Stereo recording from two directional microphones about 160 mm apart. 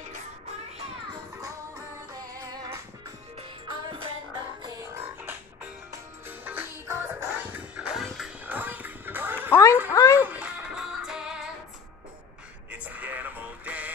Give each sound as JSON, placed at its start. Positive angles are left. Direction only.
{"t": 2.3, "sound": "music", "side_deg": -25}
{"t": 8.5, "sound": "music", "side_deg": -10}
{"t": 9.5, "sound": "snicker", "side_deg": 20}
{"t": 9.8, "sound": "a sound", "side_deg": 20}
{"t": 10.2, "sound": "music", "side_deg": -10}
{"t": 12.7, "sound": "music", "side_deg": -10}